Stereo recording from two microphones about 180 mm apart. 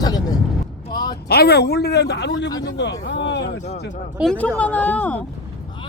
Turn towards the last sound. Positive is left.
turn(degrees=10)  # may be behind; listen again after turning